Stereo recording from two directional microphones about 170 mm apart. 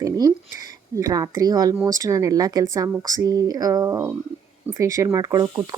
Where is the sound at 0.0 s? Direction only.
20° right (ahead or behind).